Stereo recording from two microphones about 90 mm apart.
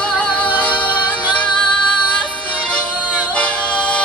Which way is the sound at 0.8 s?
60° left (ahead or behind).